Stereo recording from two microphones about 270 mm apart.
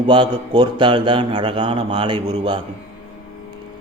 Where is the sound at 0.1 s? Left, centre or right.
Centre.